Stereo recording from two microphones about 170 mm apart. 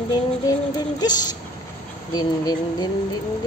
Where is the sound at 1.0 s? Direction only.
25° left (ahead or behind).